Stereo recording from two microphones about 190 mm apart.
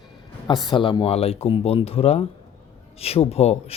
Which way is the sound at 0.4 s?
25° left (ahead or behind).